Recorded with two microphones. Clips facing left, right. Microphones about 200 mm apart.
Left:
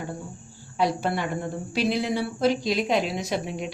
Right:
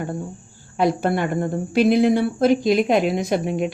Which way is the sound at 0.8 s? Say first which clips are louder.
Right 5 dB; 50° right (ahead or behind).